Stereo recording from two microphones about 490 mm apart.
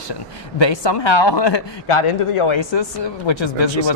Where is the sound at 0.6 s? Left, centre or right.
Left.